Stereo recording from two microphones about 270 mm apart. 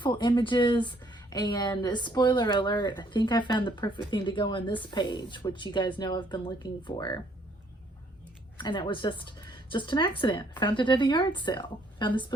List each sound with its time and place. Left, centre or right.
0.0 s speech: centre
8.5 s speech: centre